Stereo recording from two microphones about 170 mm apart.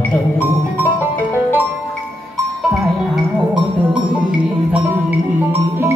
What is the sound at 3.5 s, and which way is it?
Music, 30° right (ahead or behind).